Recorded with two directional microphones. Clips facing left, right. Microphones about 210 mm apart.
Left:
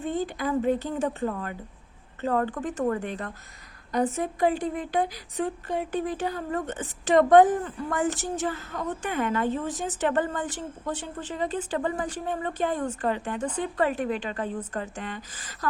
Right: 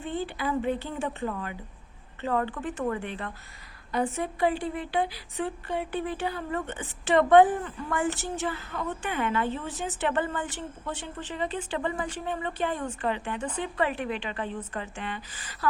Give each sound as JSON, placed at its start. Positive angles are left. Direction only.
{"t": 0.0, "sound": "speech", "side_deg": 40}